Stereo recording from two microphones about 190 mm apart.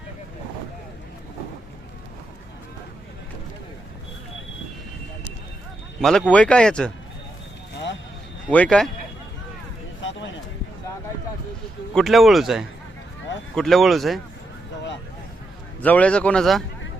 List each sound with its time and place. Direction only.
6.0 s speech: 5° left (ahead or behind)
8.4 s speech: 5° left (ahead or behind)
10.0 s a sound: 75° left (ahead or behind)
11.9 s speech: centre (ahead or behind)
15.8 s a man's voice: 5° left (ahead or behind)